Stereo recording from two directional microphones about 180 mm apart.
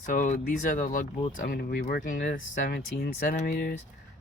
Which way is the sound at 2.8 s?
60° left (ahead or behind).